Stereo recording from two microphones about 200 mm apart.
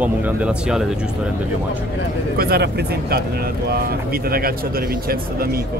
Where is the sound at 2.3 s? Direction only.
50° right (ahead or behind).